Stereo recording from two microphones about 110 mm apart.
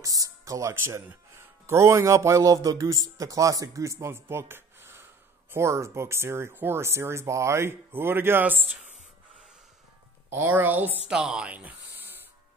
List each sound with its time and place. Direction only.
0.0 s speech: 30° right (ahead or behind)
10.3 s speech: 20° right (ahead or behind)
11.1 s speech: 5° right (ahead or behind)